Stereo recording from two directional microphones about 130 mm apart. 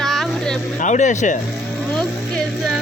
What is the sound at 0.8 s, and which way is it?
Speech, 70° left (ahead or behind).